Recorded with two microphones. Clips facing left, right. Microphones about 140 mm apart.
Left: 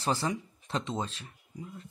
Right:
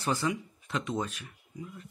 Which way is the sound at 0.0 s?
30° left (ahead or behind).